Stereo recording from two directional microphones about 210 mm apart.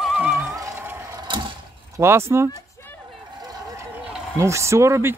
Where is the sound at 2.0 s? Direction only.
10° right (ahead or behind).